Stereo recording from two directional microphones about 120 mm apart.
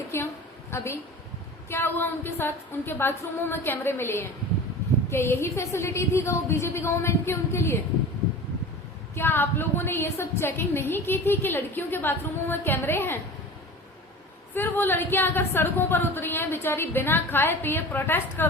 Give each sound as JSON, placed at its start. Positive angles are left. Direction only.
{"t": 0.1, "sound": "a sound", "side_deg": 20}
{"t": 0.7, "sound": "a woman's voice", "side_deg": 20}
{"t": 9.1, "sound": "a woman's voice", "side_deg": 15}
{"t": 14.5, "sound": "a woman's voice", "side_deg": 15}